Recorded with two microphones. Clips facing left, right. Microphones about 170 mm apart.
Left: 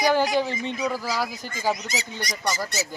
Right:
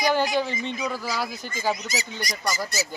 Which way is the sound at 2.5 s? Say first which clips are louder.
Even; centre (ahead or behind).